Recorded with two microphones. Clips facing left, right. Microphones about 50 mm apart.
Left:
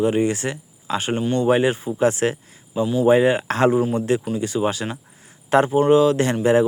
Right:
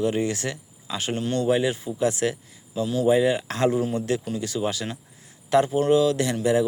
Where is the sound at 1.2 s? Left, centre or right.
Centre.